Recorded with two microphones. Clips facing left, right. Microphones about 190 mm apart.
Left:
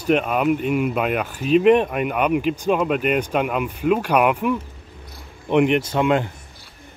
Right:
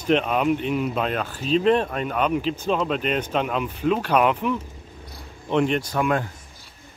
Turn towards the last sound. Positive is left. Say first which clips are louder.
# left 4 dB
turn(degrees=25)  # may be behind; listen again after turning